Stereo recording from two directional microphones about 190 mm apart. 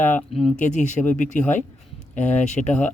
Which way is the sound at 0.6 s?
40° left (ahead or behind).